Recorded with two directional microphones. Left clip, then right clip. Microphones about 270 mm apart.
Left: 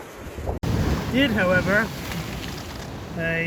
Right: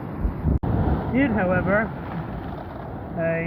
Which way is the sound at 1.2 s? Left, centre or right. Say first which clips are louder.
Left 3 dB; centre.